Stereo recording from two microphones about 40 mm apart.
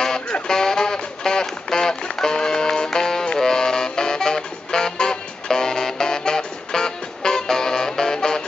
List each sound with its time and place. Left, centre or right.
0.5 s music: centre